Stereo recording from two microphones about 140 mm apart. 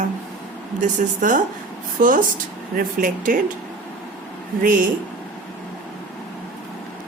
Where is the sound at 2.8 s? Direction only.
80° right.